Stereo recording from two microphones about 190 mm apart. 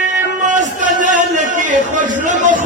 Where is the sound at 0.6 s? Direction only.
40° right (ahead or behind).